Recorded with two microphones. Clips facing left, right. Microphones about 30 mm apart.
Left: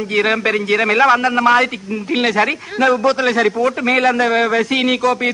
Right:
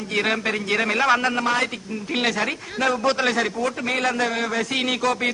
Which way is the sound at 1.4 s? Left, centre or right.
Centre.